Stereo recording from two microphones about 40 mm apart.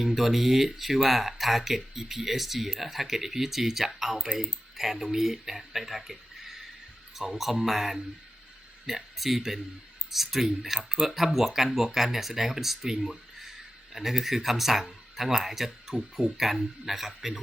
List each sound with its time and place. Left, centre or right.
0.0 s speech: centre